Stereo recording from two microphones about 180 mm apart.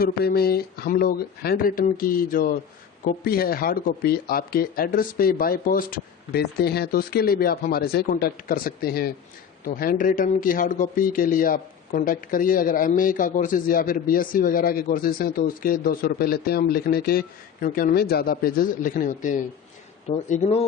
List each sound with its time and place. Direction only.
0.0 s a man's voice: 60° left (ahead or behind); by 20.7 s 40° left (ahead or behind)